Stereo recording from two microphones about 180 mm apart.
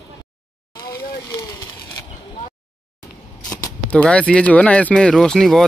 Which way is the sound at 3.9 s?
5° left (ahead or behind).